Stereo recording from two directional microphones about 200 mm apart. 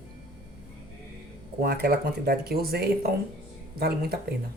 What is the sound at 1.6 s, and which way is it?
Speech, 50° right (ahead or behind).